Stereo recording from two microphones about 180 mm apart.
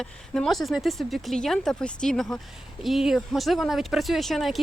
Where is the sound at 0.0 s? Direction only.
Centre (ahead or behind).